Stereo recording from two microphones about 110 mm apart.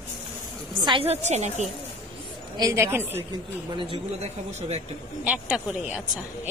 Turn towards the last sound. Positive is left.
turn(degrees=-5)  # may be behind; listen again after turning